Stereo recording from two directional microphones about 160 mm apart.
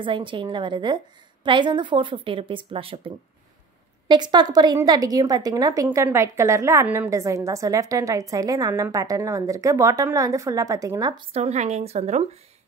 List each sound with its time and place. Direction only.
0.0 s a woman's voice: 30° right (ahead or behind)
4.1 s a woman's voice: 25° right (ahead or behind)
11.3 s a woman's voice: 40° right (ahead or behind)